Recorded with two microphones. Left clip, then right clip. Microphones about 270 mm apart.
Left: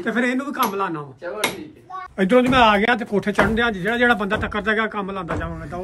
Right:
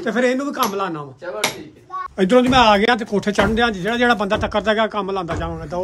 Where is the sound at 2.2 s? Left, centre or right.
Centre.